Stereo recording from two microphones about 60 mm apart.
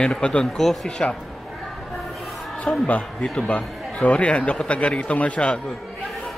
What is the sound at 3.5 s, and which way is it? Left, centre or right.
A man's voice, left.